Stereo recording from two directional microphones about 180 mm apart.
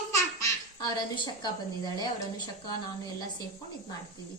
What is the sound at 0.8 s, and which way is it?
A woman's voice, 25° left (ahead or behind).